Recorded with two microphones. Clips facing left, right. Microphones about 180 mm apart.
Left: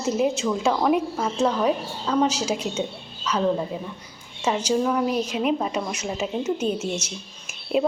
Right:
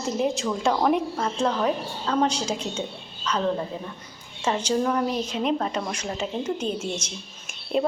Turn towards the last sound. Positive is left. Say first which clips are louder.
# left 2 dB
turn(degrees=5)  # may be behind; listen again after turning